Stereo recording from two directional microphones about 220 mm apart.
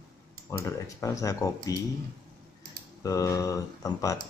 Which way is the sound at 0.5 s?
15° left (ahead or behind).